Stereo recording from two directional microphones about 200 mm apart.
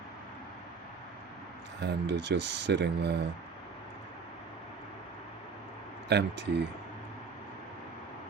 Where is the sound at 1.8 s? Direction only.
60° right (ahead or behind).